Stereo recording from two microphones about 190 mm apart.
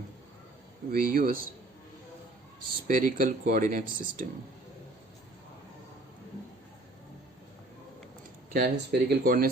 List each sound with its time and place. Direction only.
0.9 s speech: 50° right (ahead or behind)
2.8 s speech: 45° right (ahead or behind)
8.5 s speech: 55° right (ahead or behind)